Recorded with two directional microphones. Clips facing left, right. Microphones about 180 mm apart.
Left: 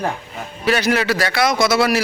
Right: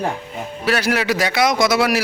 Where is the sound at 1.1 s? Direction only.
20° right (ahead or behind).